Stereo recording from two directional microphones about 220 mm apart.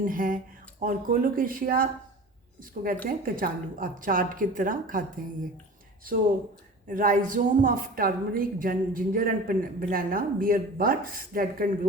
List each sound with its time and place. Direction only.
0.0 s a woman's voice: 40° right (ahead or behind)
6.8 s a woman's voice: 40° right (ahead or behind)